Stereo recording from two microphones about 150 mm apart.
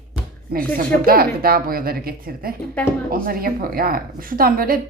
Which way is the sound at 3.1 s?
75° right (ahead or behind).